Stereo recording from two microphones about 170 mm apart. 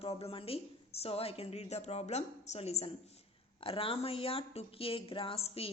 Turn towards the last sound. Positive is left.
turn(degrees=35)  # may be behind; listen again after turning